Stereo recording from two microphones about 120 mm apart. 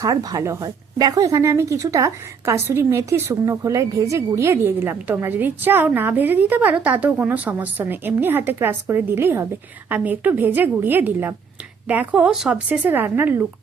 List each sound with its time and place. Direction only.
0.0 s speech: 30° right (ahead or behind)